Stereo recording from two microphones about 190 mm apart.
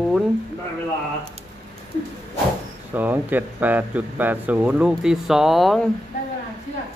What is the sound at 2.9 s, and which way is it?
Speech, 10° right (ahead or behind).